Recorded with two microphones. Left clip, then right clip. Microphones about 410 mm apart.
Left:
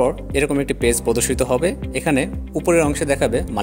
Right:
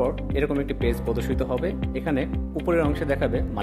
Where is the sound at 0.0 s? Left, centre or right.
Centre.